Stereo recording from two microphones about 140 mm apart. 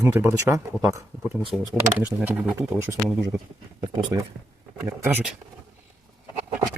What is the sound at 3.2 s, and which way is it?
Speech, 25° right (ahead or behind).